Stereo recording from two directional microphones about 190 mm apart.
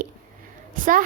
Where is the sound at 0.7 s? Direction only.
45° right (ahead or behind).